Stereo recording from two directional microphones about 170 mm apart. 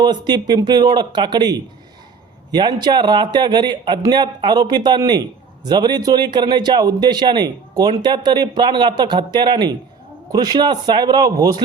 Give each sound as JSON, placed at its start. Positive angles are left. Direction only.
{"t": 0.0, "sound": "a man's voice", "side_deg": -25}